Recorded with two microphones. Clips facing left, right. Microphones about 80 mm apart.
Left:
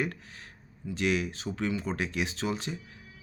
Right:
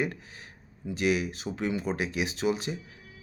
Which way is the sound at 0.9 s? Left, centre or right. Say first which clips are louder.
Right 2 dB; centre.